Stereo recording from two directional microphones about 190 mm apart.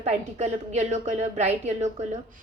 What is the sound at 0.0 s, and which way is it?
A woman's voice, 35° right (ahead or behind).